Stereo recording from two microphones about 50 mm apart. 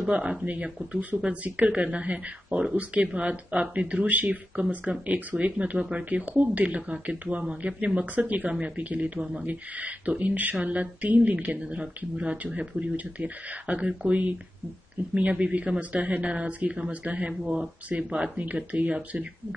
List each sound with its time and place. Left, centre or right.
0.1 s speech: right
6.0 s speech: right